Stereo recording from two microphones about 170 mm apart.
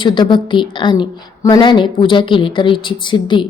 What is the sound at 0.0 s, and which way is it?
A woman's voice, 25° left (ahead or behind).